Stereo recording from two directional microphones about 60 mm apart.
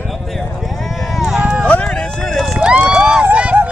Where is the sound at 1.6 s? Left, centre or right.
Centre.